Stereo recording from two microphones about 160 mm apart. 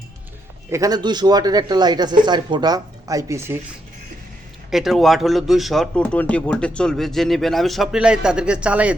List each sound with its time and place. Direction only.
0.7 s speech: 20° right (ahead or behind)
4.7 s speech: centre (ahead or behind)